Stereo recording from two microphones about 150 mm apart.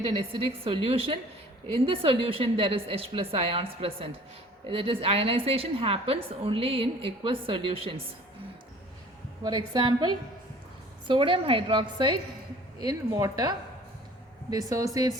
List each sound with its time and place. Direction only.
0.0 s a woman's voice: 40° right (ahead or behind)
9.4 s a woman's voice: 30° right (ahead or behind)